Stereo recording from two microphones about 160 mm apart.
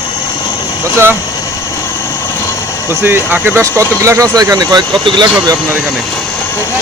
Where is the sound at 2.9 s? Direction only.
15° right (ahead or behind).